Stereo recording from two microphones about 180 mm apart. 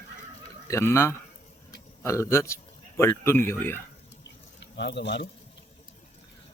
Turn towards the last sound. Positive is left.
turn(degrees=75)  # may be behind; listen again after turning